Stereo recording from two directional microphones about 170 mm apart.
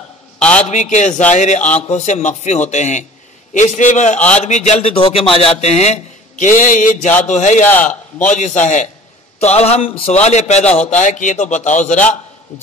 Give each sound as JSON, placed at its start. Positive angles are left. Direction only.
{"t": 0.4, "sound": "a sound", "side_deg": 5}
{"t": 0.7, "sound": "a man's voice", "side_deg": 45}
{"t": 7.6, "sound": "a man's voice", "side_deg": 10}
{"t": 8.3, "sound": "a man's voice", "side_deg": 45}